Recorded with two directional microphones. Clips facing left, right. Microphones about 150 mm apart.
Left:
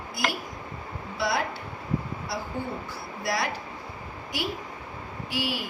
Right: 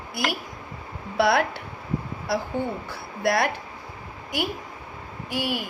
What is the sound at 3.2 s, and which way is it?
Speech, 60° right (ahead or behind).